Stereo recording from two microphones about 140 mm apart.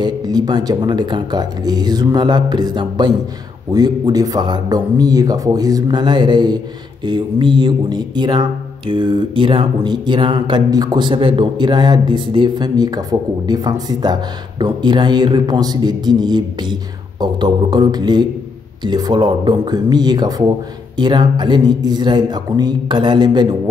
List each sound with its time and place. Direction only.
0.0 s speech: 30° right (ahead or behind)